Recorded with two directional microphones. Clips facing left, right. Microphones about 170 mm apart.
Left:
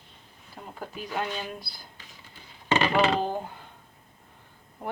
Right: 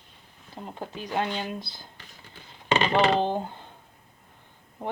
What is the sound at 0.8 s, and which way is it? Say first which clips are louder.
Speech: right 3 dB; 20° right (ahead or behind).